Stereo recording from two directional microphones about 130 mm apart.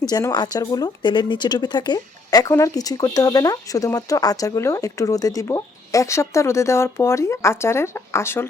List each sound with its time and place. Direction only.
0.1 s speech: 30° left (ahead or behind)